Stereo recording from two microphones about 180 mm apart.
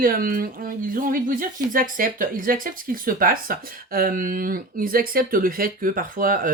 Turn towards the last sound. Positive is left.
turn(degrees=-50)  # may be behind; listen again after turning